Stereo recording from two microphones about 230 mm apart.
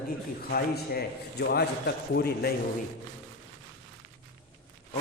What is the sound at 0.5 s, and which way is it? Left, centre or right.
A man's voice, left.